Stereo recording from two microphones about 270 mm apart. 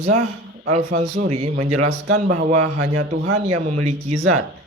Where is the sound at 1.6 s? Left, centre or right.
Right.